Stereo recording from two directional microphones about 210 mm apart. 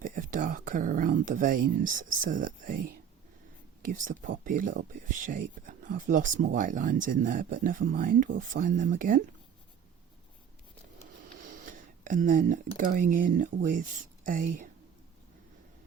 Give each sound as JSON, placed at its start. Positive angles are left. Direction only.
{"t": 0.0, "sound": "speech", "side_deg": -40}
{"t": 11.6, "sound": "speech", "side_deg": -40}